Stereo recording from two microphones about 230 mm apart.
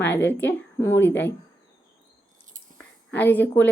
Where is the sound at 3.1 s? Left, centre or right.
Centre.